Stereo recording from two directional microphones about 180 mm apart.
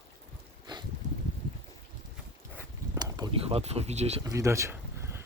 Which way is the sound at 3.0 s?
20° right (ahead or behind).